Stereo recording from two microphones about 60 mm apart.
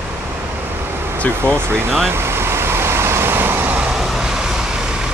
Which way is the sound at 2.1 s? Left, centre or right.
Right.